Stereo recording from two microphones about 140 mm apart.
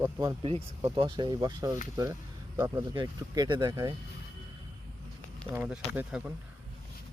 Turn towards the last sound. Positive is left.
turn(degrees=-10)  # may be behind; listen again after turning